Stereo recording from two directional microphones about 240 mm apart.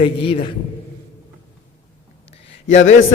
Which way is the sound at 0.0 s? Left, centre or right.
Left.